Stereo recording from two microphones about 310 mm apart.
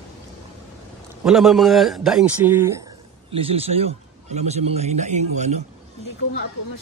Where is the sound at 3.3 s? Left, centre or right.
Centre.